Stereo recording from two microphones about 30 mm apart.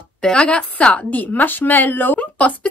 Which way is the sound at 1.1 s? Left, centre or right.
Left.